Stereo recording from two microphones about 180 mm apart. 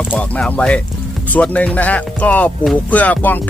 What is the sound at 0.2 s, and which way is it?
Speech, 5° left (ahead or behind).